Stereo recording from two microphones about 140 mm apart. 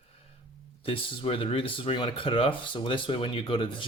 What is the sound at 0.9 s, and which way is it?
Speech, 40° left (ahead or behind).